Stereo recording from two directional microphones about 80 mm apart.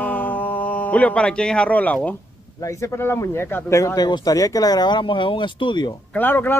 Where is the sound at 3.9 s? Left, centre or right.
Left.